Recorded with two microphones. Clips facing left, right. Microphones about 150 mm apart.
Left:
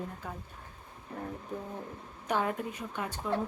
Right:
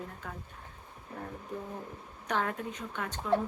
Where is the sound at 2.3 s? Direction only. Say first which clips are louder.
Left 2 dB; 10° left (ahead or behind).